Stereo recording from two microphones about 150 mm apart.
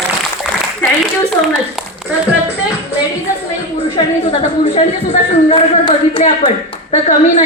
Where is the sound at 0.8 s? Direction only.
15° left (ahead or behind).